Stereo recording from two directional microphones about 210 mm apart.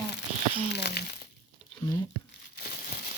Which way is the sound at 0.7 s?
50° left (ahead or behind).